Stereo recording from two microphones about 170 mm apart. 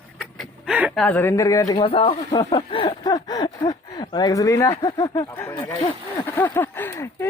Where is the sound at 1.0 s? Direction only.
10° left (ahead or behind).